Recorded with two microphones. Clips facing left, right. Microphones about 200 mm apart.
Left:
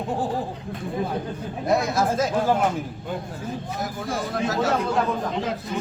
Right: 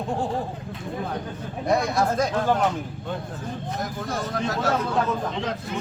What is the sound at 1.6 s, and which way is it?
Speech, centre (ahead or behind).